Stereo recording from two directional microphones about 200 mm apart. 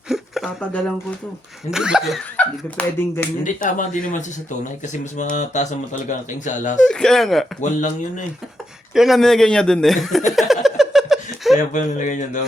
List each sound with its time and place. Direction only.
0.1 s a sound: centre (ahead or behind)
1.7 s speech: 5° right (ahead or behind)
3.4 s speech: 40° left (ahead or behind)
5.1 s speech: 40° left (ahead or behind)
6.8 s speech: centre (ahead or behind)
9.0 s speech: centre (ahead or behind)
10.3 s a sound: centre (ahead or behind)
11.7 s speech: 40° left (ahead or behind)